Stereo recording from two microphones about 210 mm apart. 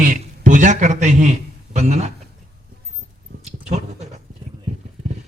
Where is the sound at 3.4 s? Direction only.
30° right (ahead or behind).